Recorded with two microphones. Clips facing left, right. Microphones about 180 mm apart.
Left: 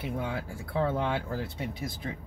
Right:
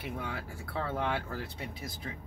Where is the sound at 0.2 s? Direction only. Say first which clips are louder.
Left 5 dB; 20° left (ahead or behind).